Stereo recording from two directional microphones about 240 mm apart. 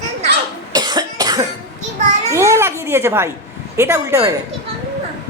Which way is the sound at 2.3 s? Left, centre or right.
Centre.